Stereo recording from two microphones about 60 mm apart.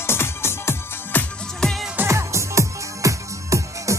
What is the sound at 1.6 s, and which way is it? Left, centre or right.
Music, centre.